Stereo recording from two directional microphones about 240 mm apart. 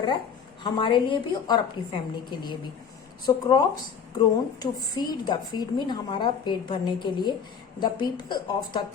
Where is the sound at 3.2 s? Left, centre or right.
Centre.